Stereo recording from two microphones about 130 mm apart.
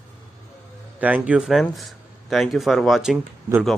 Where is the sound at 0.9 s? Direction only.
10° right (ahead or behind).